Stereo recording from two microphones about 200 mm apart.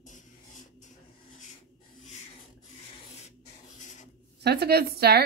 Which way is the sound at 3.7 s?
35° left (ahead or behind).